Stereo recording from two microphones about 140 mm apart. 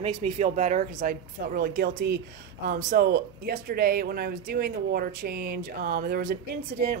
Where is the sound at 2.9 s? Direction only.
90° right.